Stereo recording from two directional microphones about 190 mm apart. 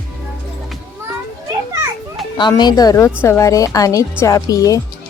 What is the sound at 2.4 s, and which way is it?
Speech, 20° left (ahead or behind).